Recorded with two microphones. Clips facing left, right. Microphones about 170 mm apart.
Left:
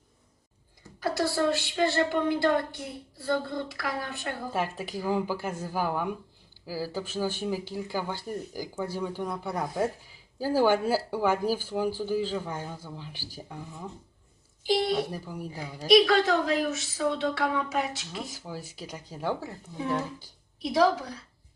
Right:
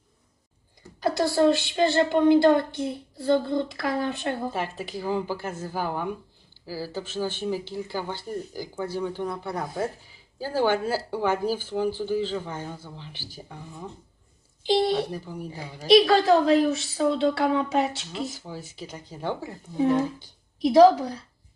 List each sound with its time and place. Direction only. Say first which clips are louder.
0.9 s speech: right 5 dB; 20° right (ahead or behind)
4.5 s speech: even; 10° left (ahead or behind)
14.6 s a woman's voice: right 3 dB; 25° right (ahead or behind)
15.1 s speech: right 2 dB; 10° left (ahead or behind)
15.9 s speech: right 3 dB; 30° right (ahead or behind)
18.2 s speech: right 6 dB; 5° left (ahead or behind)
20.7 s speech: right 8 dB; 30° right (ahead or behind)